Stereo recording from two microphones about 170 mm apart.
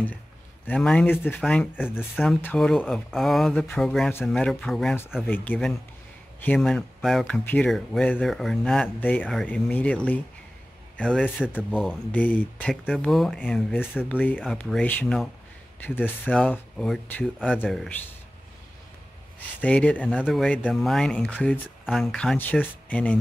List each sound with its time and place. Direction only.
0.7 s speech: 5° left (ahead or behind)
12.1 s speech: 10° left (ahead or behind)
12.8 s speech: centre (ahead or behind)
19.6 s speech: 10° left (ahead or behind)